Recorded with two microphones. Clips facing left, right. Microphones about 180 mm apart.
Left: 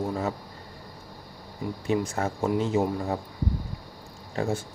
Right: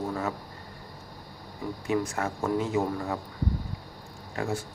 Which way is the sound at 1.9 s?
25° left (ahead or behind).